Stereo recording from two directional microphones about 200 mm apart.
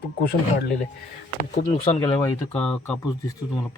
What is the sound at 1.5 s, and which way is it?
Speech, 35° left (ahead or behind).